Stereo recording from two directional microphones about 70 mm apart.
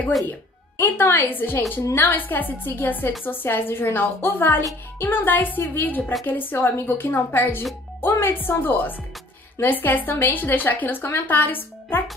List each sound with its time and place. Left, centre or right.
0.3 s a woman's voice: left